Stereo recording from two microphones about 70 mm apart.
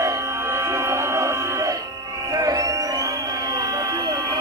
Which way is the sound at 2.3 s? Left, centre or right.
Right.